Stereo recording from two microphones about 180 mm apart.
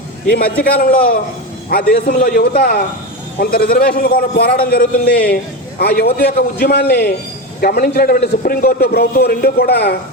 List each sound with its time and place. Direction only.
0.3 s a man's voice: 55° left (ahead or behind)